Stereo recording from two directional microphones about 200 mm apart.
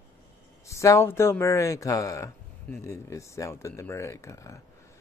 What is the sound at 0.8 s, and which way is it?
Speech, 15° left (ahead or behind).